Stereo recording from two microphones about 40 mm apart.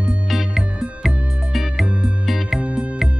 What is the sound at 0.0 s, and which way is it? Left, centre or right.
Music, centre.